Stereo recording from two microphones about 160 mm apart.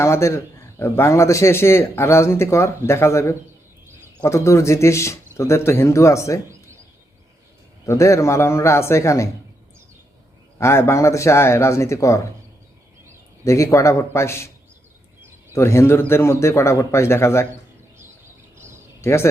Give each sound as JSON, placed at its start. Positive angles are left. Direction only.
{"t": 0.0, "sound": "a man's voice", "side_deg": 15}
{"t": 7.9, "sound": "a man's voice", "side_deg": 20}
{"t": 10.6, "sound": "a man's voice", "side_deg": 15}
{"t": 13.4, "sound": "a man's voice", "side_deg": 20}
{"t": 15.5, "sound": "a man's voice", "side_deg": 15}
{"t": 19.0, "sound": "a man's voice", "side_deg": 15}